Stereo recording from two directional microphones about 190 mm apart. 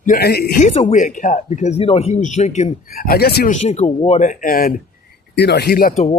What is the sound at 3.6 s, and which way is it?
Speech, 30° left (ahead or behind).